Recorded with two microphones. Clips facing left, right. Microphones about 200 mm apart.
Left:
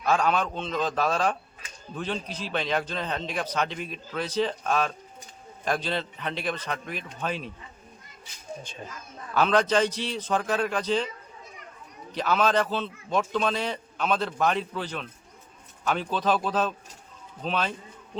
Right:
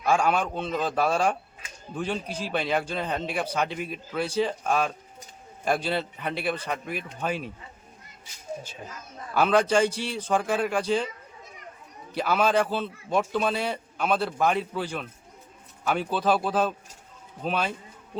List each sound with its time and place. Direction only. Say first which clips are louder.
0.0 s a man's voice: right 1 dB; 10° right (ahead or behind)
9.3 s a man's voice: right 1 dB; 10° right (ahead or behind)
12.1 s a man's voice: right 1 dB; 10° right (ahead or behind)